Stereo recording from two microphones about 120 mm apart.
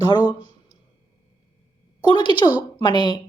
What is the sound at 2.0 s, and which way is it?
Speech, 35° left (ahead or behind).